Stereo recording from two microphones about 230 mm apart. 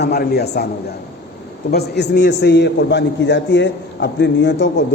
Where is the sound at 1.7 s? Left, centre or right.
Left.